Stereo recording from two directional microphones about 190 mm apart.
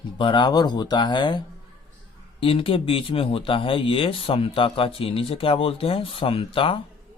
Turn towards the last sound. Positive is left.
turn(degrees=30)  # may be behind; listen again after turning